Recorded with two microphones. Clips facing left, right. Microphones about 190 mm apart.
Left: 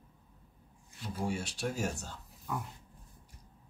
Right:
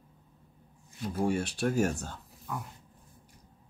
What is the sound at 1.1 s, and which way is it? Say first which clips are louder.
Speech: right 7 dB; 55° right (ahead or behind).